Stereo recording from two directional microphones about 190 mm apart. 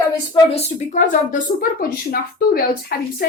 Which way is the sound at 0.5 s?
35° left (ahead or behind).